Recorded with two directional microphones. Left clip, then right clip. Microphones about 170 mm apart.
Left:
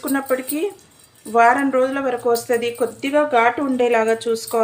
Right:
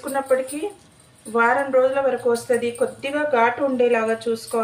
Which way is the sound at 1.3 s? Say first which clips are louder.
Left 3 dB; 55° left (ahead or behind).